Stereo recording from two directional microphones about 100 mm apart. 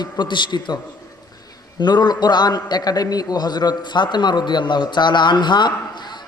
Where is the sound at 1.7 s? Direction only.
45° left (ahead or behind).